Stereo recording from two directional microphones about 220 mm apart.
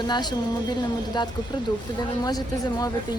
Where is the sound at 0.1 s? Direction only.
20° left (ahead or behind).